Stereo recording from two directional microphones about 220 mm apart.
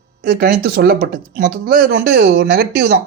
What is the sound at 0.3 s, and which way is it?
A man's voice, 45° right (ahead or behind).